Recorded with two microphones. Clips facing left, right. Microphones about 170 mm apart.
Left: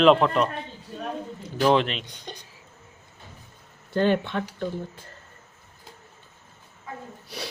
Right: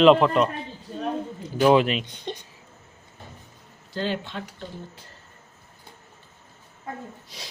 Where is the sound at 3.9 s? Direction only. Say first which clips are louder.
Left 6 dB; 55° left (ahead or behind).